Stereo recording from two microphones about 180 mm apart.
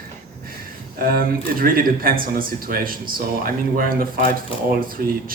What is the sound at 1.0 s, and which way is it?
Speech, 55° right (ahead or behind).